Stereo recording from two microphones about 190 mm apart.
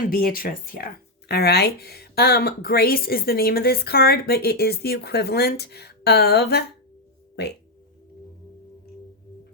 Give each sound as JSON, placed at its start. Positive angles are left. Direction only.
{"t": 0.1, "sound": "speech", "side_deg": 50}